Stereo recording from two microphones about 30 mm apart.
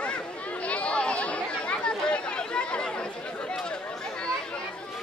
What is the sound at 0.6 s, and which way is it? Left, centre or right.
Chatter, left.